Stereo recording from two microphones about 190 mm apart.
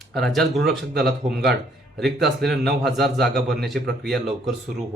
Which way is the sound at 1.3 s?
60° right (ahead or behind).